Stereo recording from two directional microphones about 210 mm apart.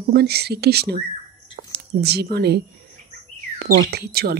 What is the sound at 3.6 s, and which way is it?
Speech, 50° right (ahead or behind).